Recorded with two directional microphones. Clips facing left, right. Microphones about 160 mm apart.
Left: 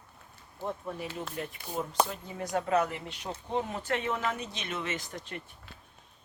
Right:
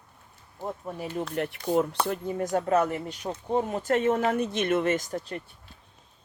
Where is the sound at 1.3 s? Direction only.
70° right (ahead or behind).